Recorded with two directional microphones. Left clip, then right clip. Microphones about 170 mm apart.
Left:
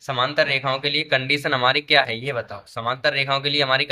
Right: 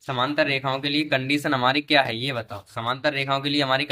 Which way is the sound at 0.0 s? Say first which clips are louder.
Left 2 dB; 15° right (ahead or behind).